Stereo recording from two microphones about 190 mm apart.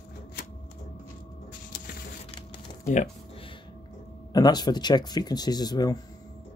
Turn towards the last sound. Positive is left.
turn(degrees=20)  # may be behind; listen again after turning